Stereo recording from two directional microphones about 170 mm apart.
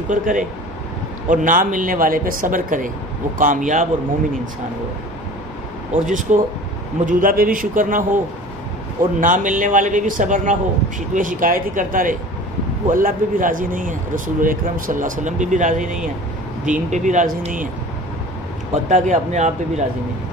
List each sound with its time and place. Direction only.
0.1 s speech: 50° right (ahead or behind)
6.0 s speech: 50° right (ahead or behind)
9.2 s speech: 50° right (ahead or behind)
18.9 s speech: 45° right (ahead or behind)